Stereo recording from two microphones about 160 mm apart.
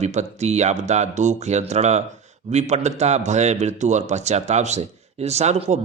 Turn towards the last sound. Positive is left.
turn(degrees=-45)  # may be behind; listen again after turning